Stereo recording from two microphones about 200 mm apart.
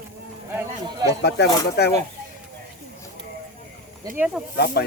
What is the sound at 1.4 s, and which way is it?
Speech, 60° left (ahead or behind).